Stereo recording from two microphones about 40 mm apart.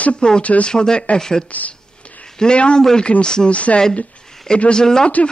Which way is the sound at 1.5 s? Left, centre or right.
Left.